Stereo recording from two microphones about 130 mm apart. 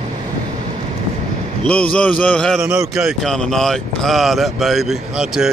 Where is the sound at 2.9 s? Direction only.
Centre (ahead or behind).